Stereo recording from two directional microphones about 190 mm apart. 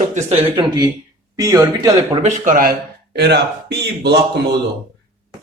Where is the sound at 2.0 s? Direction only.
40° right (ahead or behind); by 4.2 s 60° right (ahead or behind).